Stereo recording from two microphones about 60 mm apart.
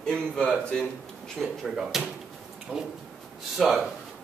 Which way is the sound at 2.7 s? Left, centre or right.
Right.